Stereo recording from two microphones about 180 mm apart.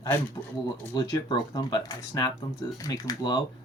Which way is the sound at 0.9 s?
20° left (ahead or behind).